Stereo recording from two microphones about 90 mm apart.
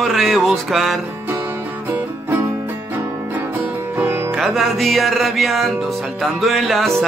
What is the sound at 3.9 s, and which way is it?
Music, 30° right (ahead or behind).